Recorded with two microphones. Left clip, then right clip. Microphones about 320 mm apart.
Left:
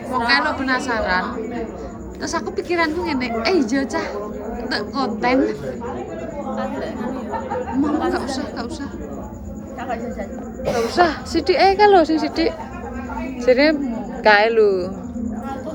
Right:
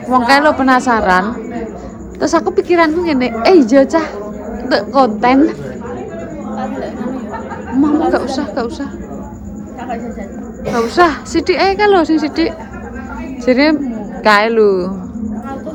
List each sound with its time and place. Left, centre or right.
0.1 s a woman's voice: centre
2.2 s a woman's voice: centre
6.6 s chatter: centre
7.8 s a woman's voice: centre
10.9 s a woman's voice: centre